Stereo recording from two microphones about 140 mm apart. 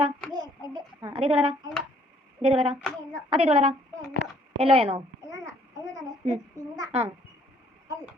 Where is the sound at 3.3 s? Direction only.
45° right (ahead or behind).